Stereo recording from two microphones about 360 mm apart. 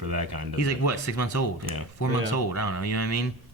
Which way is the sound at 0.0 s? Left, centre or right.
Right.